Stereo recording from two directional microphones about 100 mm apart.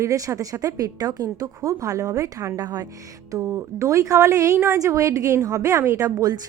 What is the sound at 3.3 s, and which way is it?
A woman's voice, 25° right (ahead or behind).